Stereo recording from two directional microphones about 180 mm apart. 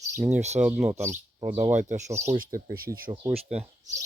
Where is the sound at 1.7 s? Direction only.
45° right (ahead or behind).